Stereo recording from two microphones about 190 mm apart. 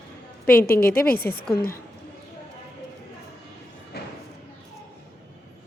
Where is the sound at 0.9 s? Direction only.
50° left (ahead or behind).